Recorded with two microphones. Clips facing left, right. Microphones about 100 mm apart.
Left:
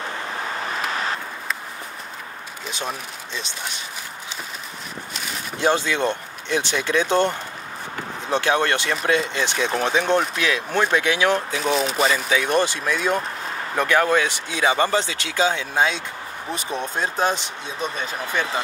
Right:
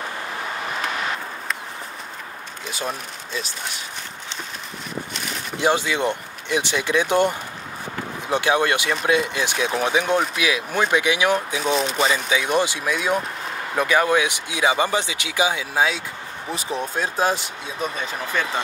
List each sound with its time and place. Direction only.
5.6 s speech: 15° right (ahead or behind); by 12.3 s centre (ahead or behind)
12.3 s speech: 10° right (ahead or behind)